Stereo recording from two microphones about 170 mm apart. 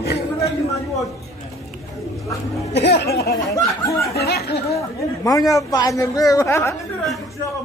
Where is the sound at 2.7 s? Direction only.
75° left (ahead or behind).